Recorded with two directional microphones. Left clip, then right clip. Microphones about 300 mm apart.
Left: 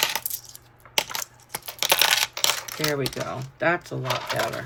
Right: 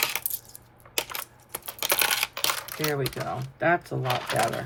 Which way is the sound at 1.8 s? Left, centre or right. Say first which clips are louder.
Left 5 dB; centre.